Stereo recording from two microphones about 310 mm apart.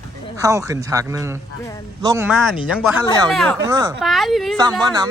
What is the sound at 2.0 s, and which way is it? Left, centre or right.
A woman's voice, centre.